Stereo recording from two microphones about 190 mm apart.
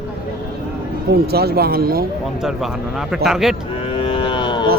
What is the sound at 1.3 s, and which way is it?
Speech, 55° right (ahead or behind).